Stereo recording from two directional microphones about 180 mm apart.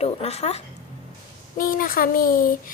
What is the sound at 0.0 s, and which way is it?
Speech, 35° left (ahead or behind).